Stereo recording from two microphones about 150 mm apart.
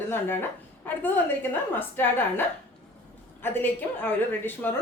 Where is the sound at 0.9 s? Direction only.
10° left (ahead or behind).